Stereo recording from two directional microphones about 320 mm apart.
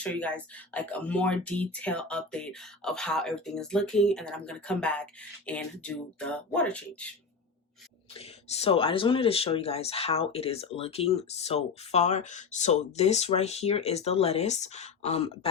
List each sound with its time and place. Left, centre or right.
0.0 s speech: centre
8.1 s speech: centre